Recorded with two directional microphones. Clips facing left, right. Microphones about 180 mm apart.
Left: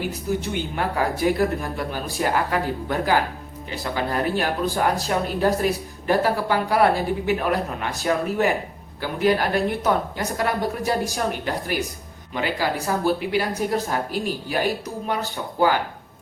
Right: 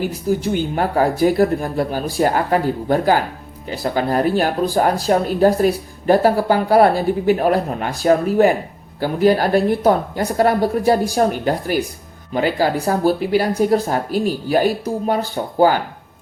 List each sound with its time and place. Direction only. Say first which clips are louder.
0.4 s speech: right 6 dB; 35° right (ahead or behind)